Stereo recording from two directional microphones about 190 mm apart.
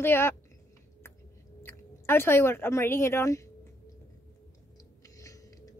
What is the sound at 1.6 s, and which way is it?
Speech, 10° left (ahead or behind).